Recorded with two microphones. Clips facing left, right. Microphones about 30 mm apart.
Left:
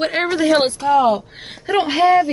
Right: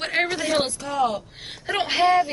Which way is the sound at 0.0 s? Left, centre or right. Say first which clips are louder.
Left 5 dB; centre.